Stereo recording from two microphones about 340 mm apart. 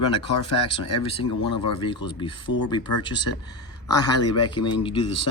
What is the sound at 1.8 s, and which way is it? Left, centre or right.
Speech, centre.